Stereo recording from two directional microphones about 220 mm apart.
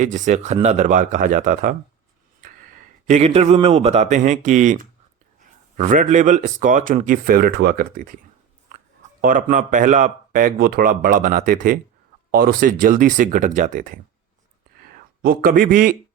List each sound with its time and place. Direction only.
0.0 s a man's voice: 35° right (ahead or behind)
9.2 s a man's voice: 35° right (ahead or behind)
15.2 s a man's voice: 40° right (ahead or behind)